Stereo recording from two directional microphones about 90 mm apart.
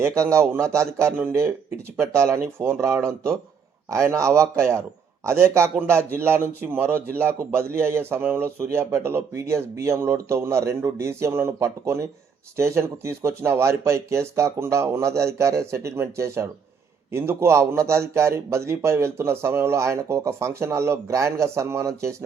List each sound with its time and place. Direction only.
0.0 s a man's voice: 35° right (ahead or behind)